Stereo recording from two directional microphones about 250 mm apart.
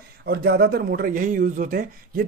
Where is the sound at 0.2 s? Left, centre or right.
Right.